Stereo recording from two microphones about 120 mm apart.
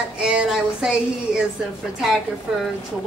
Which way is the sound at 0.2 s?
5° right (ahead or behind).